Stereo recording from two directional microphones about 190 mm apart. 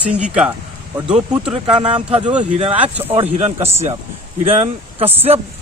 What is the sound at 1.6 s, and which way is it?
Speech, 25° right (ahead or behind).